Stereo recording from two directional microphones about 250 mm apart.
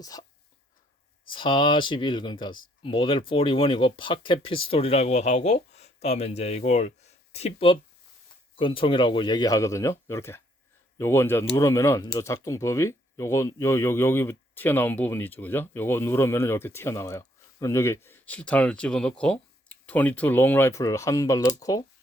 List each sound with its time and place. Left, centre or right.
0.0 s speech: centre
1.3 s speech: centre